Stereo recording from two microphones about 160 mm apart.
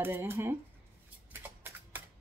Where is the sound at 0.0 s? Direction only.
15° right (ahead or behind).